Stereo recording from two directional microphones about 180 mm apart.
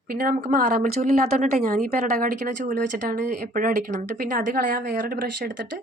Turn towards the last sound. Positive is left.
turn(degrees=-50)  # may be behind; listen again after turning